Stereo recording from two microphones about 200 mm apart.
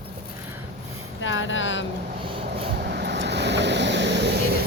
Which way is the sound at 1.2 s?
70° left (ahead or behind).